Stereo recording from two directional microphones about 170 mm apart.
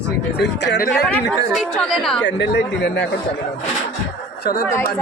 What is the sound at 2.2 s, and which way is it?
Speech, 90° left.